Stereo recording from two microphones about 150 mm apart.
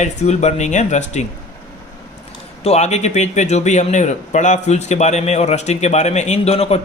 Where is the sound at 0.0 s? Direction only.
50° left (ahead or behind).